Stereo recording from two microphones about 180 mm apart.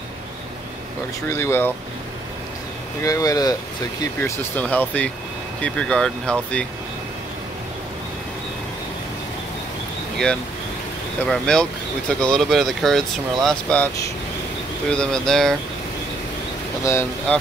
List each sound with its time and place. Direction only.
1.2 s speech: 15° left (ahead or behind)
3.0 s speech: 20° left (ahead or behind)
11.2 s speech: 5° left (ahead or behind)
14.9 s speech: 5° left (ahead or behind)
16.8 s speech: 15° left (ahead or behind)